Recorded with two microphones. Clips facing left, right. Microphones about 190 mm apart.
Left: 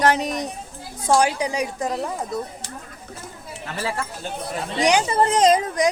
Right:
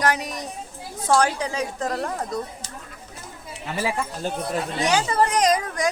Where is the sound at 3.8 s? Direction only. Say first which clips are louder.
Right 2 dB; 15° right (ahead or behind).